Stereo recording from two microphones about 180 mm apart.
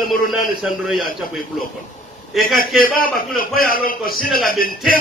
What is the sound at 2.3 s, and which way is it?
Speech, centre (ahead or behind).